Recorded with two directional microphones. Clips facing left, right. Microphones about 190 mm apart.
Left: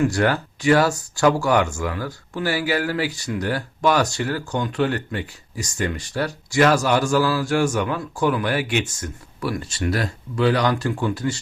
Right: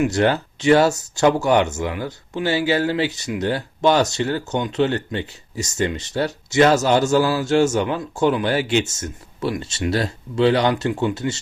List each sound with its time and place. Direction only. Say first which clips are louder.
0.0 s speech: right 2 dB; 20° right (ahead or behind)